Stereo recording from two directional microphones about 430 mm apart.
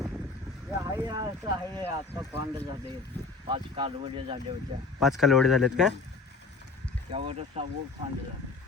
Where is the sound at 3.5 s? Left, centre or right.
Centre.